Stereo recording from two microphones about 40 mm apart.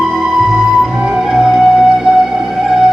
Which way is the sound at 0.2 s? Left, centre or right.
Centre.